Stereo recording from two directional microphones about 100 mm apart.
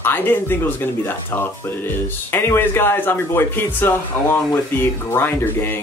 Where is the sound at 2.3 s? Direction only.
25° left (ahead or behind).